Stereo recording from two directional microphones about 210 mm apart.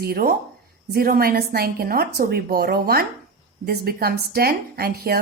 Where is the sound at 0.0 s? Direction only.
45° right (ahead or behind).